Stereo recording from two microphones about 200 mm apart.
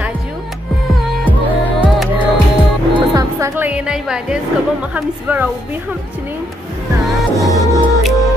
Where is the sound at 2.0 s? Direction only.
10° right (ahead or behind).